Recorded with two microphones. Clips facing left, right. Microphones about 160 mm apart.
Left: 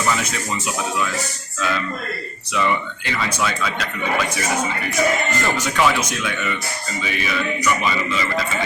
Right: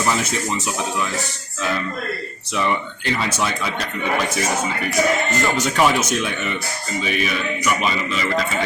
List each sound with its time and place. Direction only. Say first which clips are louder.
5.6 s speech: right 1 dB; 30° right (ahead or behind)